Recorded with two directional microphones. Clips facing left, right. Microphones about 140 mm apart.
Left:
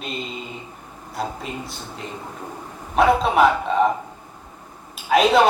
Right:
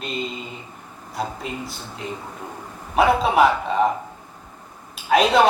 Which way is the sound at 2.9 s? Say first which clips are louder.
Even; centre (ahead or behind).